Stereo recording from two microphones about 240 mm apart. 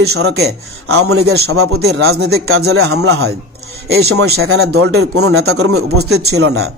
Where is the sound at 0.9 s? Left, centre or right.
Right.